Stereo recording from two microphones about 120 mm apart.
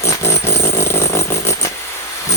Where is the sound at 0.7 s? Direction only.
20° left (ahead or behind).